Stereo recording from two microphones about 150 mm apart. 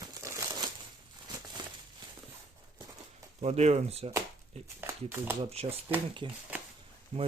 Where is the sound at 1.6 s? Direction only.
30° right (ahead or behind).